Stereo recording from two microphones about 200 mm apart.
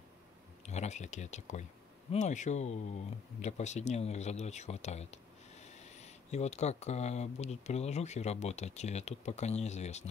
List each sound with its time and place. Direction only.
0.7 s speech: 35° left (ahead or behind)